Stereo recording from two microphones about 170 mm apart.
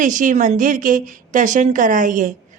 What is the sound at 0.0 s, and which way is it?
A woman's voice, 50° right (ahead or behind).